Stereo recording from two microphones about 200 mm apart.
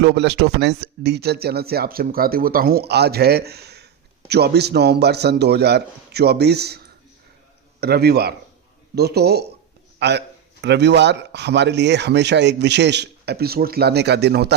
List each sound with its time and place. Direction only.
0.0 s a man's voice: 55° right (ahead or behind)